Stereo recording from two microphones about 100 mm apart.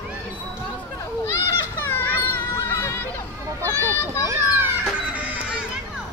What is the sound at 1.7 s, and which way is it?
Cat, 20° left (ahead or behind).